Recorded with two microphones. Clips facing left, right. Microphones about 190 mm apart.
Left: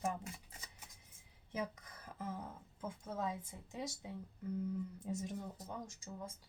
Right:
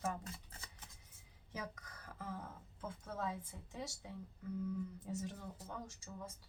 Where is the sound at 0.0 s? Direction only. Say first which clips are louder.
Left 2 dB; 15° left (ahead or behind).